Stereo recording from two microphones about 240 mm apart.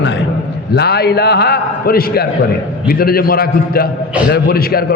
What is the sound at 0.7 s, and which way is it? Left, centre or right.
A man's voice, left.